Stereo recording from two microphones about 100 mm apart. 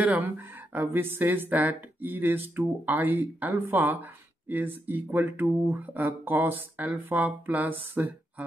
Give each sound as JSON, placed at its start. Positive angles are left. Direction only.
{"t": 0.0, "sound": "speech", "side_deg": -15}